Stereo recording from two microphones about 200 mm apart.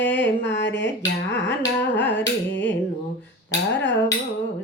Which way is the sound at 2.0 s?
10° left (ahead or behind).